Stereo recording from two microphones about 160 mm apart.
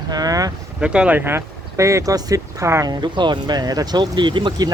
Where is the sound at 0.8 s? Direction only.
5° right (ahead or behind).